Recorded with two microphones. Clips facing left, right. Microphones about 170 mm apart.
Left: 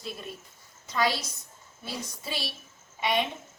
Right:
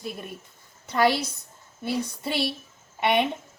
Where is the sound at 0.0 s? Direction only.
55° right (ahead or behind).